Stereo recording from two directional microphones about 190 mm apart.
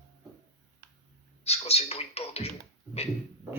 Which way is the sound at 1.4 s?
35° left (ahead or behind).